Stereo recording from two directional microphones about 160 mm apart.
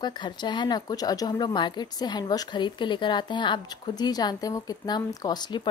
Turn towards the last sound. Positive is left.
turn(degrees=25)  # may be behind; listen again after turning